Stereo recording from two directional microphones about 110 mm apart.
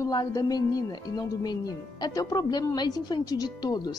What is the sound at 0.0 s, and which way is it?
Speech, 35° left (ahead or behind).